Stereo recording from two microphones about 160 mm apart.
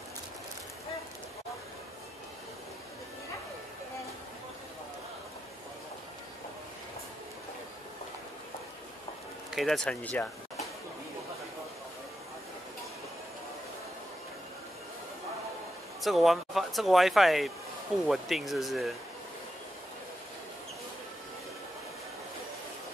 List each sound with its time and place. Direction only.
9.5 s speech: centre (ahead or behind)
16.0 s speech: centre (ahead or behind)